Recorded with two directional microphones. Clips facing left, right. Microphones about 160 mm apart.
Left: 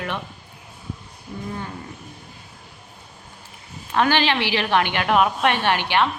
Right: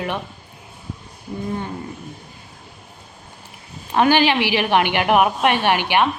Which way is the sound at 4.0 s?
15° right (ahead or behind).